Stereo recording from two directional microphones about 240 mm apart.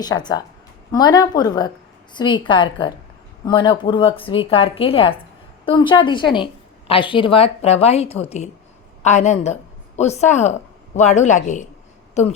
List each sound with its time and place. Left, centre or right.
0.0 s a woman's voice: centre